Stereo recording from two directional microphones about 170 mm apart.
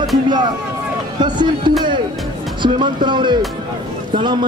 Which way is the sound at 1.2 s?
25° right (ahead or behind).